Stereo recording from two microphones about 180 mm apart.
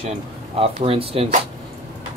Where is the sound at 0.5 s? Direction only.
30° right (ahead or behind).